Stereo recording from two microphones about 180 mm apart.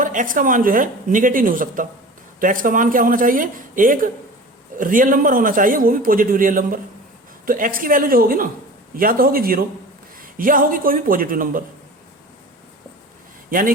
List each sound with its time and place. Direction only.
0.0 s a man's voice: 45° right (ahead or behind)
13.5 s a man's voice: 50° right (ahead or behind)